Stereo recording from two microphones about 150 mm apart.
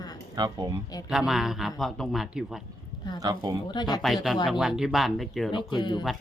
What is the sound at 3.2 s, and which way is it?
Speech, 30° right (ahead or behind).